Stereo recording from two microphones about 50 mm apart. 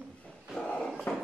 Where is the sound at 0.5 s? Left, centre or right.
Centre.